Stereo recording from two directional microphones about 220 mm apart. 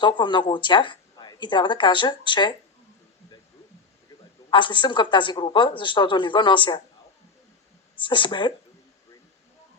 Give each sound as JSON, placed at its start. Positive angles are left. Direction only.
{"t": 0.0, "sound": "a woman's voice", "side_deg": 20}
{"t": 4.5, "sound": "a woman's voice", "side_deg": 20}
{"t": 7.9, "sound": "a woman's voice", "side_deg": 20}